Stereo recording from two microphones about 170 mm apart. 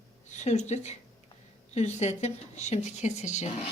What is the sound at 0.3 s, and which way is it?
A woman's voice, 40° left (ahead or behind).